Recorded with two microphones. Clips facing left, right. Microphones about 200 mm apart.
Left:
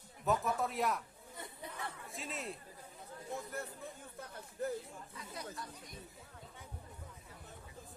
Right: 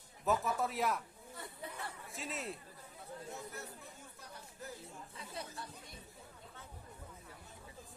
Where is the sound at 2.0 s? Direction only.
Centre (ahead or behind).